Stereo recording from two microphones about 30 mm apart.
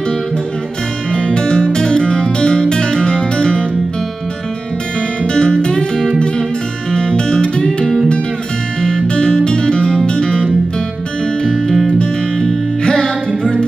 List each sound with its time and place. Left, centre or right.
1.1 s music: left
5.2 s music: left
6.9 s music: left
7.6 s music: centre
9.0 s music: left
11.4 s music: centre
12.8 s music: centre